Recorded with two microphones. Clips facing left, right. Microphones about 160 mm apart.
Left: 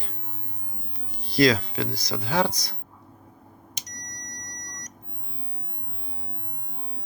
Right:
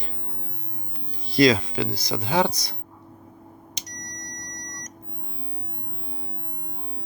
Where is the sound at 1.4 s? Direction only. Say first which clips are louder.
Right 2 dB; 20° right (ahead or behind).